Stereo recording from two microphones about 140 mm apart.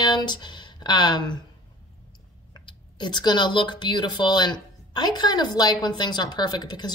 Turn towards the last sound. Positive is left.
turn(degrees=30)  # may be behind; listen again after turning